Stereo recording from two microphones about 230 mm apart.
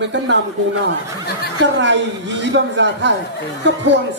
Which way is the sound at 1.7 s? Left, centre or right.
Right.